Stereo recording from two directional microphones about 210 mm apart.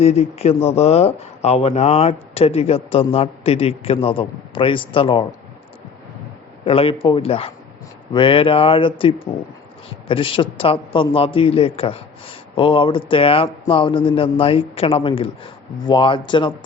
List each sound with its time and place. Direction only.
0.0 s a man's voice: 30° left (ahead or behind)
6.7 s a man's voice: 25° left (ahead or behind)